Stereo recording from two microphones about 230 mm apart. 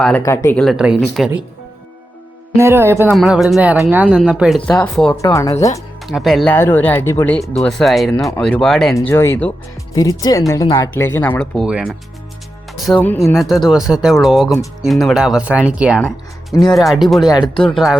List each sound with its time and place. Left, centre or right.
0.2 s speech: centre
2.6 s speech: centre
3.1 s speech: centre
6.1 s speech: centre
17.2 s speech: centre
17.6 s speech: centre